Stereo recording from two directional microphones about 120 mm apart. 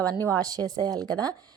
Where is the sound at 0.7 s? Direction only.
35° right (ahead or behind).